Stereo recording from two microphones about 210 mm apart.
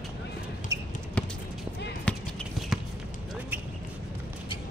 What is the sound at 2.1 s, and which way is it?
Basketball bounce, 5° left (ahead or behind).